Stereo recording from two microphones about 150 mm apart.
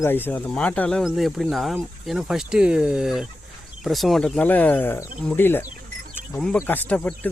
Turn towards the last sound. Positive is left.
turn(degrees=10)  # may be behind; listen again after turning